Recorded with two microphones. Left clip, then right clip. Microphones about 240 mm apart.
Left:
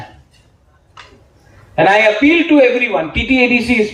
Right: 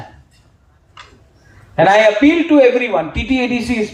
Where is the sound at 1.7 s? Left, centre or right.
Right.